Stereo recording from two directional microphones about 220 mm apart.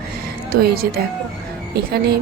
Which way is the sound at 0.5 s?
45° right (ahead or behind).